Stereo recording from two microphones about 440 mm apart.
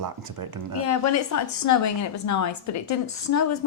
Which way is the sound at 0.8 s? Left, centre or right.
Left.